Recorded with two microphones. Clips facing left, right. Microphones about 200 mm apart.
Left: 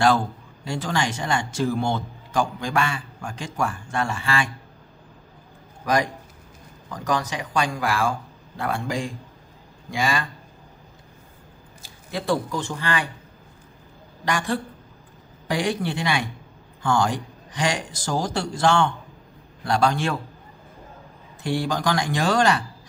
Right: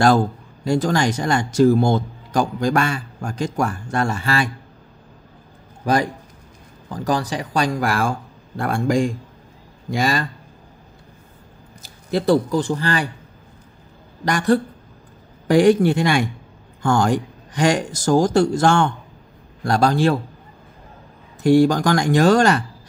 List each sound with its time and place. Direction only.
0.7 s a man's voice: 40° right (ahead or behind)
5.9 s a man's voice: 30° right (ahead or behind)
12.1 s a man's voice: 40° right (ahead or behind)
14.2 s a man's voice: 40° right (ahead or behind)
21.4 s a man's voice: 45° right (ahead or behind)